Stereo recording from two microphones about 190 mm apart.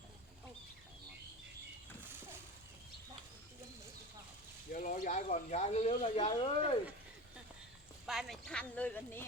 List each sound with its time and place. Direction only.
4.7 s speech: 45° left (ahead or behind); by 6.7 s 30° left (ahead or behind)
8.0 s speech: centre (ahead or behind)